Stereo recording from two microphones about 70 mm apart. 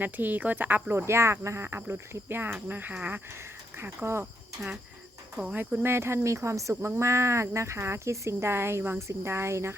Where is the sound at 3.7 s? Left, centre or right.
Right.